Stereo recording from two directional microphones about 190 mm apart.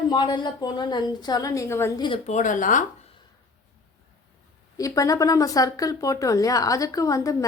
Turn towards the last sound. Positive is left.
turn(degrees=15)  # may be behind; listen again after turning